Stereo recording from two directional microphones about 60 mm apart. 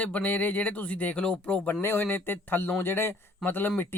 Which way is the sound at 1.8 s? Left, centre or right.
Left.